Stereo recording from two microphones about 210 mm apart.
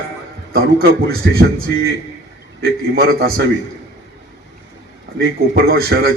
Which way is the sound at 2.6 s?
45° right (ahead or behind).